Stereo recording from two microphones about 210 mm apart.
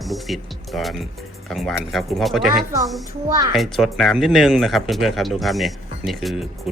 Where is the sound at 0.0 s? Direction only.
Centre (ahead or behind).